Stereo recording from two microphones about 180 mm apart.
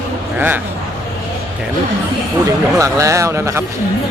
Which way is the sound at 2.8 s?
15° right (ahead or behind).